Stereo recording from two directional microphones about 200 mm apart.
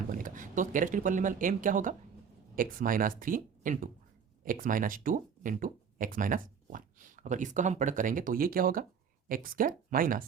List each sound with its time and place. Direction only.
0.1 s speech: 40° right (ahead or behind)